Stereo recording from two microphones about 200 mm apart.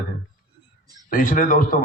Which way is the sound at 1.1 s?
40° left (ahead or behind).